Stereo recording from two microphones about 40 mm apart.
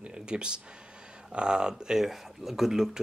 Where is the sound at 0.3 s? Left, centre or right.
Right.